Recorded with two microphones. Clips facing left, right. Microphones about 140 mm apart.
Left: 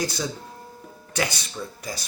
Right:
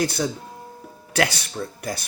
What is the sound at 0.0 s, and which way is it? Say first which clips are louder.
Speech: right 4 dB; 60° right (ahead or behind).